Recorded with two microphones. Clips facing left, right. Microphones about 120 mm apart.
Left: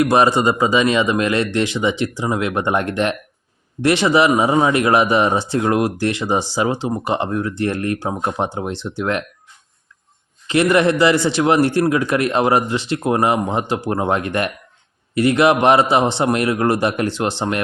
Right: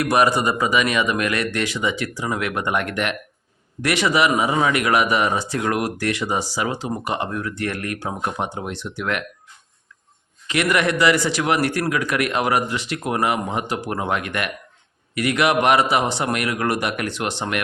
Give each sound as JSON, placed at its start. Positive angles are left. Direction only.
{"t": 0.0, "sound": "speech", "side_deg": 25}
{"t": 10.4, "sound": "speech", "side_deg": 30}